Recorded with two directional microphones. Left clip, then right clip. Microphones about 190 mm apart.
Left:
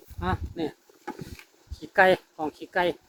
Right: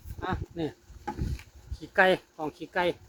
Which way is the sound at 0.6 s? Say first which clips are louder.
Left 2 dB; 35° left (ahead or behind).